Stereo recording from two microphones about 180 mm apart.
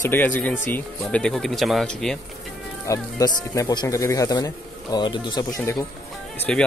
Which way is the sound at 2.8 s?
20° left (ahead or behind).